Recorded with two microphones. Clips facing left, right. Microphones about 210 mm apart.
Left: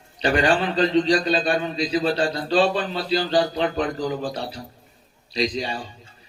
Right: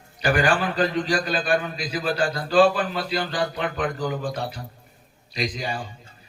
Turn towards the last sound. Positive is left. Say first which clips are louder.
# left 3 dB
turn(degrees=30)  # may be behind; listen again after turning